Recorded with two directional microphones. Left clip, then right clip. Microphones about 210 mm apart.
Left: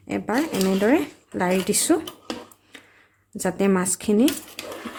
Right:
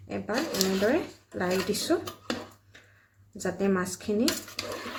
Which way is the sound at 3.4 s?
50° left (ahead or behind).